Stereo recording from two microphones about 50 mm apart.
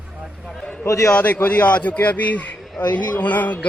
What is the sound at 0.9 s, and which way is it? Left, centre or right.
Speech, left.